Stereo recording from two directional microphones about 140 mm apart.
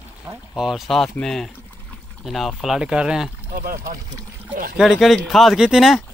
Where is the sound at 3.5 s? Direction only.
90° right.